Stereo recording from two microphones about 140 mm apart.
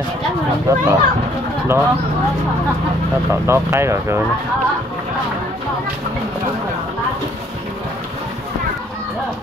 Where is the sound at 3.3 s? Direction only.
20° right (ahead or behind).